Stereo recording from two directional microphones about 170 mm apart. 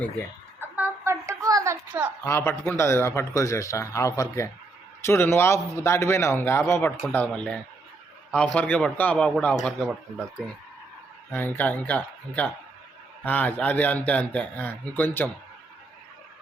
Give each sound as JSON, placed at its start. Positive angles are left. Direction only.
{"t": 0.6, "sound": "a sound", "side_deg": -15}
{"t": 2.2, "sound": "a man's voice", "side_deg": 15}
{"t": 11.3, "sound": "a man's voice", "side_deg": 15}